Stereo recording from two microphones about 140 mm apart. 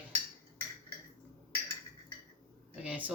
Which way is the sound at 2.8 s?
10° right (ahead or behind).